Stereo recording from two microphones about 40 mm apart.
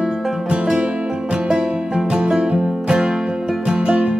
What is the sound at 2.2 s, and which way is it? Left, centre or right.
Music, centre.